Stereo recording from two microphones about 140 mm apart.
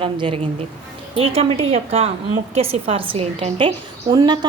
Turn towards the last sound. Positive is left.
turn(degrees=-30)  # may be behind; listen again after turning